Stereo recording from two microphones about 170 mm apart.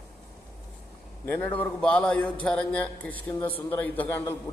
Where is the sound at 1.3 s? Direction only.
10° left (ahead or behind).